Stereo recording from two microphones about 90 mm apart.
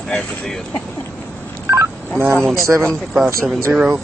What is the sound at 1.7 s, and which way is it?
Telephone dialing, 30° right (ahead or behind).